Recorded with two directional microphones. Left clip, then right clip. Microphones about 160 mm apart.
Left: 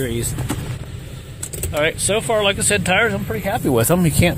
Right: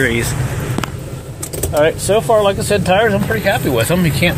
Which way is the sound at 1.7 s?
5° left (ahead or behind).